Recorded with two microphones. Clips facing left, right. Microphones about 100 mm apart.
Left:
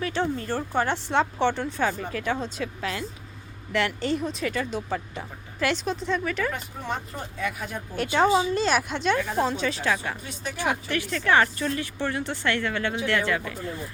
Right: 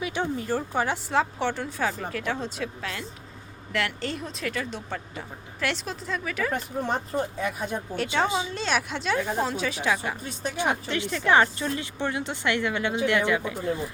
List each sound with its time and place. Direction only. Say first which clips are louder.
0.0 s speech: left 2 dB; 10° right (ahead or behind)
6.5 s speech: right 4 dB; 40° right (ahead or behind)
7.3 s speech: right 2 dB; 25° right (ahead or behind)
7.9 s speech: left 5 dB; centre (ahead or behind)
10.6 s speech: even; 20° right (ahead or behind)